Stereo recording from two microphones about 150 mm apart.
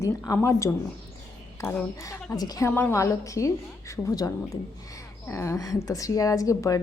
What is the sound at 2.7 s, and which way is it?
A woman's voice, 15° left (ahead or behind).